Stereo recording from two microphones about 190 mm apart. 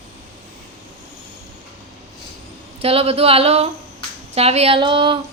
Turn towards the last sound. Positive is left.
turn(degrees=-25)  # may be behind; listen again after turning